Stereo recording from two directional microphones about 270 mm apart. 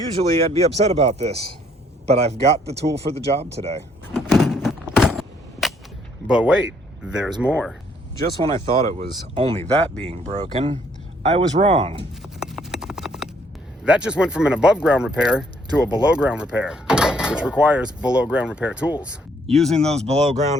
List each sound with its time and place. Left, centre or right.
0.1 s speech: right
4.1 s a sound: centre
6.2 s speech: centre
9.0 s speech: right
12.2 s clip-clop: centre
13.8 s speech: centre
20.1 s speech: right